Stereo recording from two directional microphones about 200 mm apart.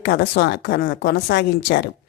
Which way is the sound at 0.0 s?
55° left (ahead or behind).